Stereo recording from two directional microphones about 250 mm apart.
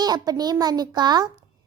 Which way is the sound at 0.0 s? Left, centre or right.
Centre.